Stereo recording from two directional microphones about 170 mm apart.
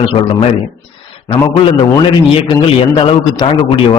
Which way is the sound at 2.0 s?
30° left (ahead or behind).